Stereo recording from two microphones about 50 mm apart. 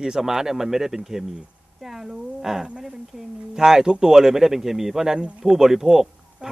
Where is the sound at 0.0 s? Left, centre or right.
Centre.